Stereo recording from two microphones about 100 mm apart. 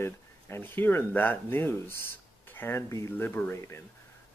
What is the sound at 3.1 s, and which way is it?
Speech, 20° left (ahead or behind).